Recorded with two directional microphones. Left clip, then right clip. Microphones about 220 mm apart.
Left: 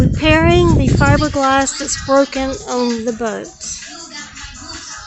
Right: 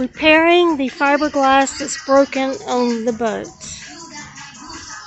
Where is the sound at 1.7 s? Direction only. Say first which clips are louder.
Left 1 dB; 20° left (ahead or behind).